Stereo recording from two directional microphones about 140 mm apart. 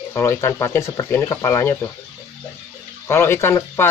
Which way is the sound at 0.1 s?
20° left (ahead or behind).